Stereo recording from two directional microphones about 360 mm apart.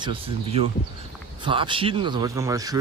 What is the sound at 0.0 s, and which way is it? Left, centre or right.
Speech, centre.